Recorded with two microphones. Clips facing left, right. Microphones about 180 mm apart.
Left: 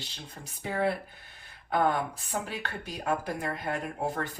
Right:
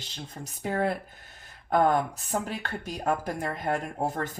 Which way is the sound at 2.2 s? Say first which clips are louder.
Right 3 dB; 45° right (ahead or behind).